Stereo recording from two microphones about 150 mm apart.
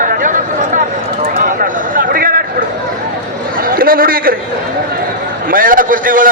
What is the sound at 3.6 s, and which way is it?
Speech, 75° right (ahead or behind).